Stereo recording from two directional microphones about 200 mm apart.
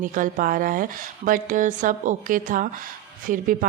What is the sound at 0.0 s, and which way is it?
A woman's voice, 40° right (ahead or behind).